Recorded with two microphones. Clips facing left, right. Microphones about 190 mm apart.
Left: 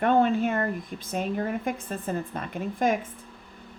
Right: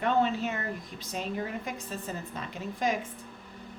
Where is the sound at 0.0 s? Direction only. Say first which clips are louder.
Left 5 dB; 50° left (ahead or behind).